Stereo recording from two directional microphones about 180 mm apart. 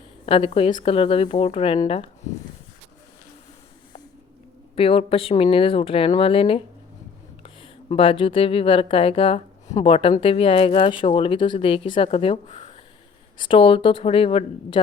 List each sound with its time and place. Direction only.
0.3 s speech: 30° left (ahead or behind)
4.7 s speech: 30° left (ahead or behind)